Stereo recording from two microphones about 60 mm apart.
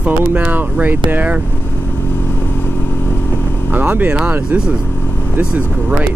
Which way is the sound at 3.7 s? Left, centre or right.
Right.